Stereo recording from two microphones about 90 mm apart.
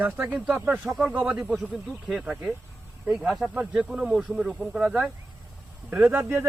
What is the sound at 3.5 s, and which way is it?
Speech, 15° right (ahead or behind).